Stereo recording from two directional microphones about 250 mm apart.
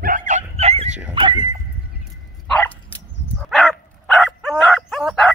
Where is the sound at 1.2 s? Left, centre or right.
Centre.